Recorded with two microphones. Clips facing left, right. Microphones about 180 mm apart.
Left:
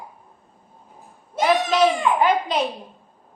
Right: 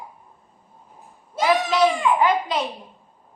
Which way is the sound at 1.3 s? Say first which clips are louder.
Left 1 dB; 20° left (ahead or behind).